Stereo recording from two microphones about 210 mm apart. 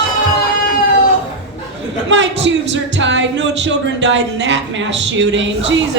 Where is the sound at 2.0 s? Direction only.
60° right (ahead or behind).